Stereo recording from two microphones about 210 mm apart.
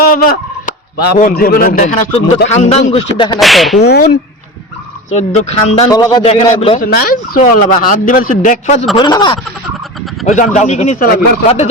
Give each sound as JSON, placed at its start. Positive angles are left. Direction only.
{"t": 0.0, "sound": "fowl", "side_deg": 45}
{"t": 1.2, "sound": "speech", "side_deg": 45}
{"t": 3.4, "sound": "whip", "side_deg": 0}
{"t": 3.8, "sound": "speech", "side_deg": 50}
{"t": 5.1, "sound": "speech", "side_deg": 30}
{"t": 5.9, "sound": "speech", "side_deg": 20}
{"t": 6.2, "sound": "speech", "side_deg": 30}
{"t": 6.8, "sound": "speech", "side_deg": 45}
{"t": 9.0, "sound": "speech", "side_deg": 20}
{"t": 10.2, "sound": "speech", "side_deg": 35}